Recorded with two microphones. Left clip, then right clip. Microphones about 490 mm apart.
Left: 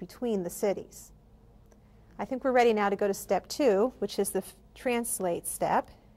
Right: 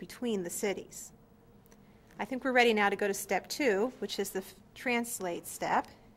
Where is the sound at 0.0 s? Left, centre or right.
Left.